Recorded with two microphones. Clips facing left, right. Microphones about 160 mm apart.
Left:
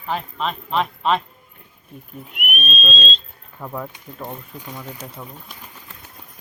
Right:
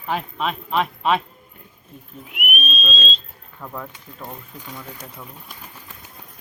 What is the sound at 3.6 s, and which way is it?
Speech, 10° left (ahead or behind).